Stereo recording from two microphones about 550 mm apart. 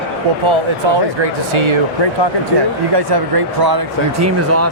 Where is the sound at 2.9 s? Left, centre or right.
Right.